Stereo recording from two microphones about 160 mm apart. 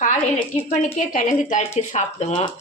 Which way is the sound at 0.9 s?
55° left (ahead or behind).